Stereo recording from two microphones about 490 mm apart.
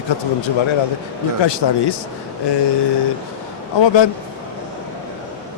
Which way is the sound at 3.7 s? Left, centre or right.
Left.